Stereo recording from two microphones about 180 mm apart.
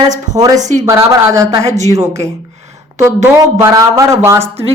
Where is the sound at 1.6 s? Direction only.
40° right (ahead or behind).